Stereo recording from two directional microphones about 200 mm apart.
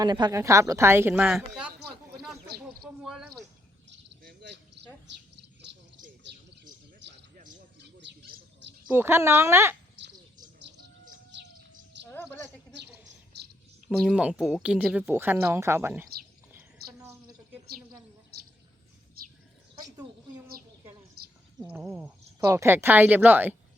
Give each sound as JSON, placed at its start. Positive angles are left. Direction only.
{"t": 0.0, "sound": "speech", "side_deg": -20}
{"t": 3.8, "sound": "bird", "side_deg": -55}
{"t": 7.0, "sound": "a sound", "side_deg": -60}
{"t": 7.8, "sound": "bird", "side_deg": -60}
{"t": 8.9, "sound": "speech", "side_deg": -10}
{"t": 13.8, "sound": "speech", "side_deg": -5}
{"t": 16.5, "sound": "bird", "side_deg": -10}
{"t": 21.6, "sound": "speech", "side_deg": -10}